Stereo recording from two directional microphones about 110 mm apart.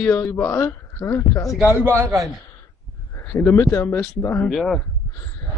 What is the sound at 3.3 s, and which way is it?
Speech, 20° left (ahead or behind).